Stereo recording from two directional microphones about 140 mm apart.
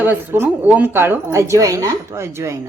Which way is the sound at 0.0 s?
15° right (ahead or behind).